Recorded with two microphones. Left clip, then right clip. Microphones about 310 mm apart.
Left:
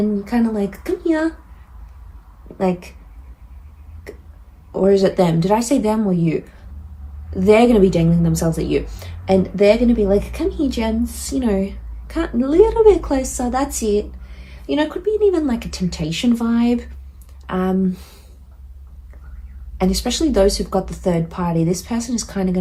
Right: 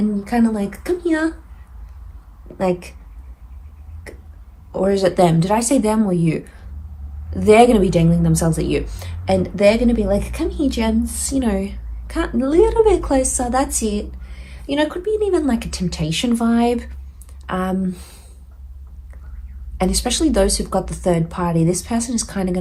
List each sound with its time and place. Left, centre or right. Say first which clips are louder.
0.2 s speech: right 1 dB; right
2.6 s speech: right 1 dB; right
4.7 s speech: left 2 dB; right
19.8 s speech: right 1 dB; right